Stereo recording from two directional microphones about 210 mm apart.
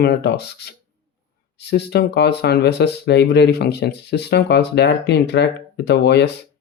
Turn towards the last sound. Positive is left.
turn(degrees=55)  # may be behind; listen again after turning